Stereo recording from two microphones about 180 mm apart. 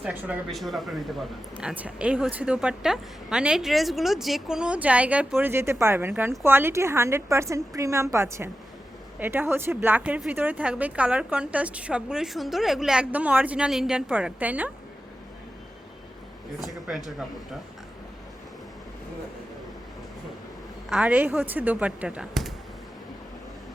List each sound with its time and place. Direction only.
0.0 s a woman's voice: 10° right (ahead or behind)
16.6 s a woman's voice: centre (ahead or behind)
20.9 s speech: 10° right (ahead or behind)